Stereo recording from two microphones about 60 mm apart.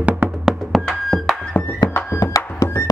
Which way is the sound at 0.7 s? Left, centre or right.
Centre.